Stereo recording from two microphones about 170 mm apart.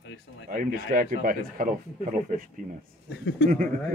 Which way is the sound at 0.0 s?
90° left.